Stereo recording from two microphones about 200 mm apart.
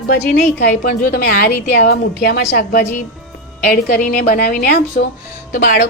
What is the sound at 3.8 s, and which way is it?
A woman's voice, 45° left (ahead or behind).